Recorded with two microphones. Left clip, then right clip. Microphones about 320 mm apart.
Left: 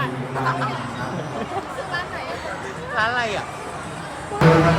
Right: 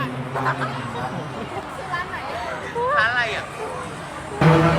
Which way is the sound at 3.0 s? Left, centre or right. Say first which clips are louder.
Left 1 dB; left.